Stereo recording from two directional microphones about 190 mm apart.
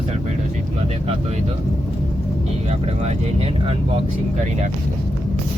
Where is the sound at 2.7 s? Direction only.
30° right (ahead or behind).